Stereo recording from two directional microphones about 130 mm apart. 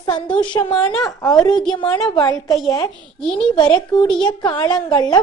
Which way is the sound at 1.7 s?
35° left (ahead or behind).